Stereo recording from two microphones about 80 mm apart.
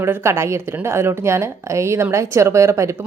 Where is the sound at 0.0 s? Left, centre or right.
Right.